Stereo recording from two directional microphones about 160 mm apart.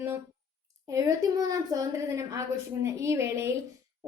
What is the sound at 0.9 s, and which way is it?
A woman's voice, 20° right (ahead or behind).